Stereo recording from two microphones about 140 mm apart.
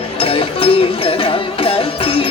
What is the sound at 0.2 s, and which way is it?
Music, 40° left (ahead or behind).